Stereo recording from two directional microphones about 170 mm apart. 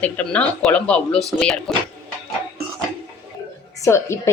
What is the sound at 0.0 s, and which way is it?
A woman's voice, 10° left (ahead or behind).